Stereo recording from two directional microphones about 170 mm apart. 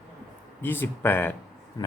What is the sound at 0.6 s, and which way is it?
Speech, 10° left (ahead or behind).